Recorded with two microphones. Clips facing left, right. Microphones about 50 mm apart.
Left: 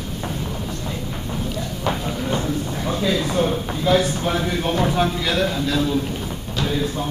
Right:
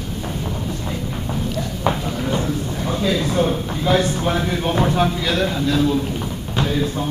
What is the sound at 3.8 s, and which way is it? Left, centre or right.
Speech, centre.